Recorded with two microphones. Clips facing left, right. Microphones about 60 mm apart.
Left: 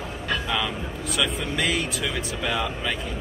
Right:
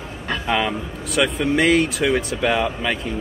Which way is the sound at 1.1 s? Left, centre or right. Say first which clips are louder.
Right 8 dB; right.